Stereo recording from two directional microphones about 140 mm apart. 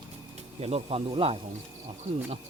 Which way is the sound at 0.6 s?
45° right (ahead or behind).